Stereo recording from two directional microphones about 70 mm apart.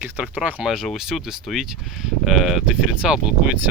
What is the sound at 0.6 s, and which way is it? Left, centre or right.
Speech, centre.